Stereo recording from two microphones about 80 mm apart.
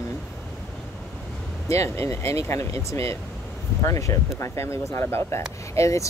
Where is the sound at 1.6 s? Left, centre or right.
Left.